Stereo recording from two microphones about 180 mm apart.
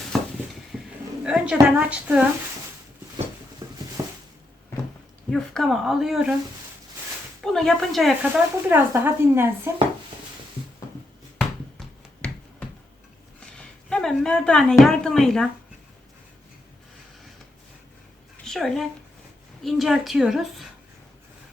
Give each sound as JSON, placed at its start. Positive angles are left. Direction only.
{"t": 0.1, "sound": "dishes", "side_deg": 0}
{"t": 0.7, "sound": "a sound", "side_deg": 0}
{"t": 1.2, "sound": "a woman's voice", "side_deg": -5}
{"t": 3.6, "sound": "patter", "side_deg": -15}
{"t": 4.0, "sound": "a sound", "side_deg": -20}
{"t": 5.3, "sound": "a woman's voice", "side_deg": 0}
{"t": 7.4, "sound": "a woman's voice", "side_deg": 0}
{"t": 8.7, "sound": "a woman's voice", "side_deg": -10}
{"t": 11.3, "sound": "finger snapping", "side_deg": 5}
{"t": 13.4, "sound": "a sound", "side_deg": 5}
{"t": 18.4, "sound": "a woman's voice", "side_deg": 0}